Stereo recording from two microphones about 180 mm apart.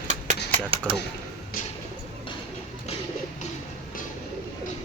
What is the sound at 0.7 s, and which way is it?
Speech, 30° right (ahead or behind).